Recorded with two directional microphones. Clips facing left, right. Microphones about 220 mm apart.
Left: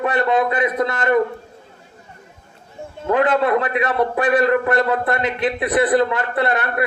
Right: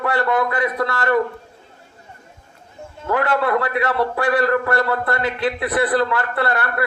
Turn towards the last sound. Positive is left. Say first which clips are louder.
# left 2 dB
turn(degrees=20)  # may be behind; listen again after turning